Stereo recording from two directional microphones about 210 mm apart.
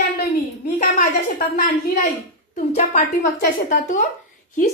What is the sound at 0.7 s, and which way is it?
Speech, 35° left (ahead or behind).